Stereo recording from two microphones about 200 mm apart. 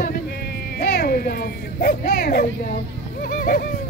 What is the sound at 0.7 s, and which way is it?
Speech, 50° left (ahead or behind).